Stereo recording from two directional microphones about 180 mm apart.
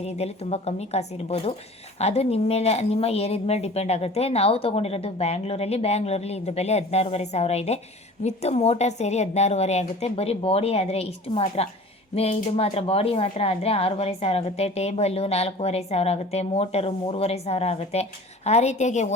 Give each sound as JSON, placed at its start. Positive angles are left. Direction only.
{"t": 0.0, "sound": "speech", "side_deg": 35}